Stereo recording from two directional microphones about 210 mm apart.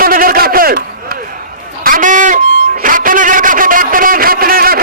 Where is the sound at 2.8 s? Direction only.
40° right (ahead or behind).